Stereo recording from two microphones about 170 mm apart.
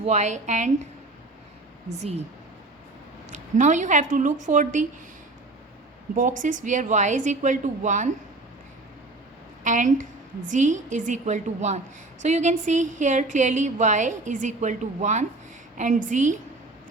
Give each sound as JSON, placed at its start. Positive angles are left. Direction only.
{"t": 0.0, "sound": "speech", "side_deg": -45}
{"t": 2.0, "sound": "speech", "side_deg": -40}
{"t": 3.3, "sound": "speech", "side_deg": -45}
{"t": 6.1, "sound": "speech", "side_deg": -50}
{"t": 9.6, "sound": "speech", "side_deg": -50}